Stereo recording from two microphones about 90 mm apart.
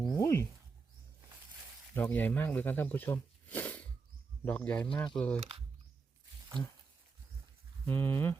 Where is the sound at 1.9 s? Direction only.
20° left (ahead or behind).